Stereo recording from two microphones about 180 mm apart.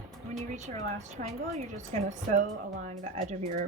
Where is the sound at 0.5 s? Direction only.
40° right (ahead or behind).